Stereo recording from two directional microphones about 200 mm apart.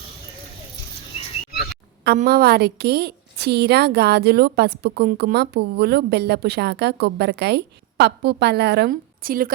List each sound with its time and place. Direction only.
2.2 s a woman's voice: 50° right (ahead or behind)